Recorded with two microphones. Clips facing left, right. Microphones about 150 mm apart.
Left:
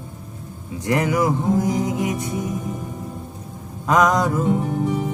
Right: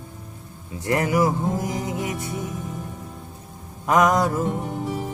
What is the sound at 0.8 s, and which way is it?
Music, 20° left (ahead or behind).